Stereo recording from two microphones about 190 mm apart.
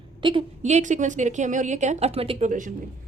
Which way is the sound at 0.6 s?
40° right (ahead or behind).